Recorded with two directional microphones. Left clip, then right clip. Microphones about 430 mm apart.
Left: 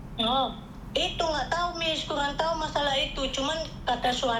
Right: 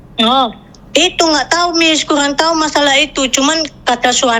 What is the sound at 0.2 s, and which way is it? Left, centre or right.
A woman's voice, right.